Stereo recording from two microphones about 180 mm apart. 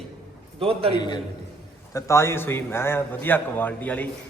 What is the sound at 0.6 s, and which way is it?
Speech, 30° right (ahead or behind).